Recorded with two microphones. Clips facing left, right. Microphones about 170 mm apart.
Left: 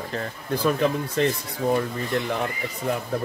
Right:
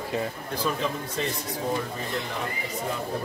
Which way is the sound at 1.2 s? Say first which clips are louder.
Left 8 dB; 65° left (ahead or behind).